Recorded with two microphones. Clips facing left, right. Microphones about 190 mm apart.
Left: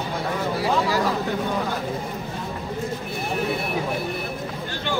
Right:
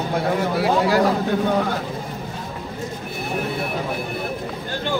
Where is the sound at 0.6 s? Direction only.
65° right (ahead or behind).